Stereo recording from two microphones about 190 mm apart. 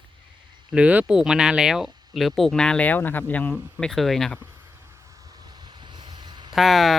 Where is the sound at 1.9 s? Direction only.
20° right (ahead or behind).